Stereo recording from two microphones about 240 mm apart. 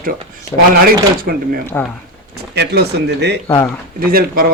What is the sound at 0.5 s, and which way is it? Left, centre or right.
Speech, centre.